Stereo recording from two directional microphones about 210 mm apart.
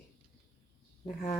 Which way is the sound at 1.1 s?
40° left (ahead or behind).